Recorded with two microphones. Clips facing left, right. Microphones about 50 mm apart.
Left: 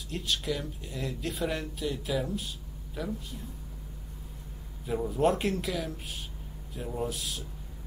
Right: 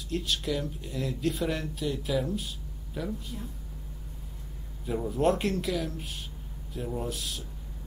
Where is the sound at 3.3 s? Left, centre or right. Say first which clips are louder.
Right 3 dB; right.